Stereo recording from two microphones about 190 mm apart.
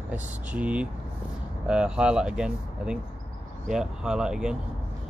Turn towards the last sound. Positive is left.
turn(degrees=-5)  # may be behind; listen again after turning